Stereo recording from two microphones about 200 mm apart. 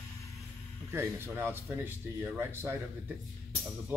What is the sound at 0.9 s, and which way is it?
Speech, 10° right (ahead or behind).